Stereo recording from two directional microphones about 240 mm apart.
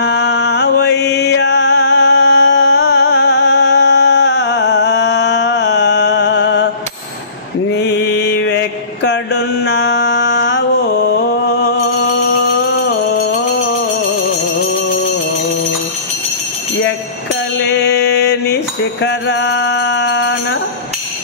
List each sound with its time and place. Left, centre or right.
0.0 s mantra: left
7.7 s mantra: left
17.6 s music: left